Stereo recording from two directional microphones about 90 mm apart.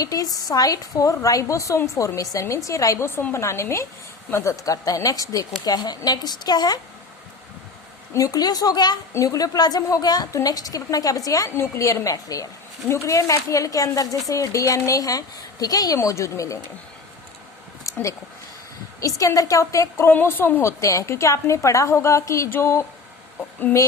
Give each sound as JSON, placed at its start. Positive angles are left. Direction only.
{"t": 0.0, "sound": "a woman's voice", "side_deg": 40}
{"t": 8.1, "sound": "a woman's voice", "side_deg": 40}
{"t": 9.1, "sound": "a woman's voice", "side_deg": 40}
{"t": 16.0, "sound": "a woman's voice", "side_deg": 35}
{"t": 17.9, "sound": "a sound", "side_deg": 40}
{"t": 18.9, "sound": "a woman's voice", "side_deg": 40}
{"t": 20.1, "sound": "a woman's voice", "side_deg": 25}